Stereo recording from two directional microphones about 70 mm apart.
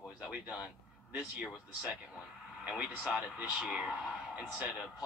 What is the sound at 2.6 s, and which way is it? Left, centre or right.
Speech, centre.